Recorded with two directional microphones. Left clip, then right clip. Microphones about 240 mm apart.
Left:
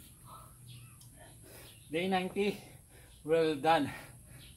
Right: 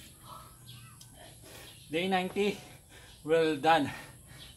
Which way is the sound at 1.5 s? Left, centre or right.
Centre.